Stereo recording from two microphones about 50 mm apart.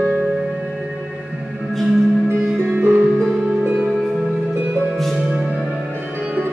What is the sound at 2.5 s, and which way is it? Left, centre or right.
Music, right.